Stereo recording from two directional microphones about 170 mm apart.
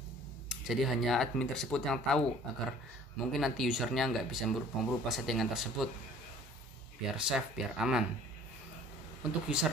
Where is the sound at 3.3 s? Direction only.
Centre (ahead or behind).